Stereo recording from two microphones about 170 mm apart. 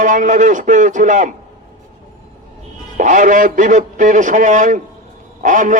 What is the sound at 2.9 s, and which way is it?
A man's voice, 50° right (ahead or behind).